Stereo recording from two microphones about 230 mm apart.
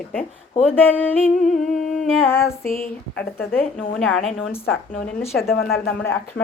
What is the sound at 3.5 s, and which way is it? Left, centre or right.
Speech, centre.